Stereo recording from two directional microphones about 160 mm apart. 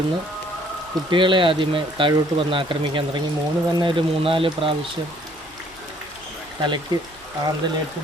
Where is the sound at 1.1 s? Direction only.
30° right (ahead or behind).